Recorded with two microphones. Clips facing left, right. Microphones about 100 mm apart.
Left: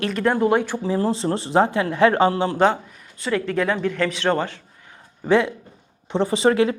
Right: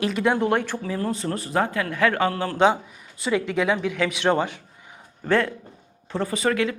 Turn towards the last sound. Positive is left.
turn(degrees=30)  # may be behind; listen again after turning